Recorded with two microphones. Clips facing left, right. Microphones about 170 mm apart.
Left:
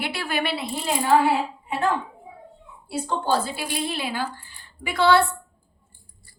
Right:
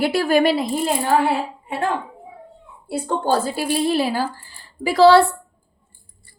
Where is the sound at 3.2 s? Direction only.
40° right (ahead or behind).